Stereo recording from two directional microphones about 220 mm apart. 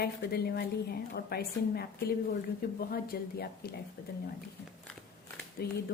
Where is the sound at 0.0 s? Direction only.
45° left (ahead or behind).